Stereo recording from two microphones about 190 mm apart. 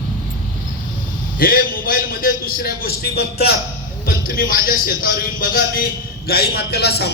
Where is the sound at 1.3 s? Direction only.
50° left (ahead or behind).